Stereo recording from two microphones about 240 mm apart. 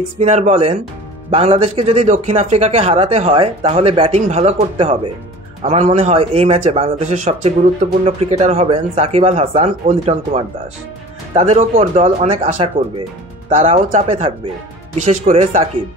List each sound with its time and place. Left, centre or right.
0.2 s speech: right